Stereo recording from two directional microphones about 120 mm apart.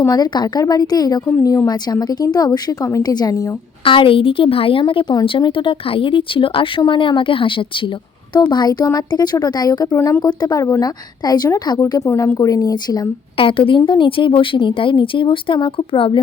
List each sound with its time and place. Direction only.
0.1 s a woman's voice: 35° left (ahead or behind)
3.8 s a woman's voice: 50° left (ahead or behind); by 13.0 s 30° left (ahead or behind)
13.3 s speech: 50° left (ahead or behind)